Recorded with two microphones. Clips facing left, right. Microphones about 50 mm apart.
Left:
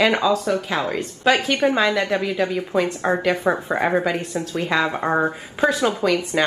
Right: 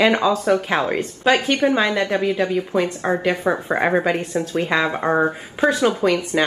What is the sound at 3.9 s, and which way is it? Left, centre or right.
Speech, right.